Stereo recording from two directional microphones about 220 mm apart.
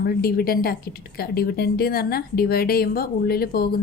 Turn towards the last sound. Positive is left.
turn(degrees=45)  # may be behind; listen again after turning